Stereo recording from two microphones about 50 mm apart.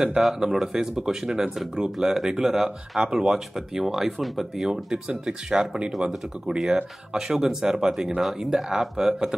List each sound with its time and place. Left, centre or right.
0.2 s speech: centre